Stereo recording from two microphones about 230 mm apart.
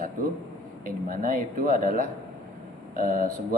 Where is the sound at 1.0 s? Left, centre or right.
Right.